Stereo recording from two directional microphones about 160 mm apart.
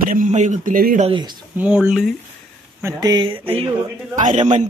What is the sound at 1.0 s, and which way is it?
Speech, 30° right (ahead or behind).